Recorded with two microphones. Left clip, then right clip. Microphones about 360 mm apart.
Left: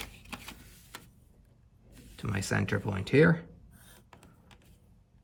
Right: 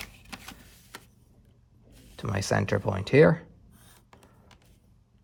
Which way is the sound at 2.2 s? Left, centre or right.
Centre.